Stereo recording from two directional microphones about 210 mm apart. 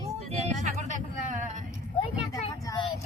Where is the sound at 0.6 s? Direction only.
35° right (ahead or behind).